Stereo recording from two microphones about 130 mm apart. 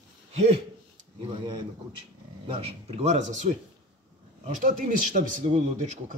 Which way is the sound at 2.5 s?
45° right (ahead or behind).